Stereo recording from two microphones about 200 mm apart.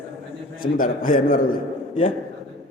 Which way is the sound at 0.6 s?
45° left (ahead or behind).